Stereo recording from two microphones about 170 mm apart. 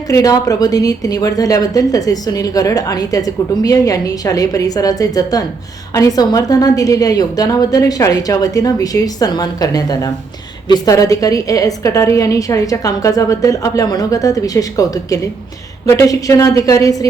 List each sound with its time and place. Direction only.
0.1 s speech: 20° left (ahead or behind)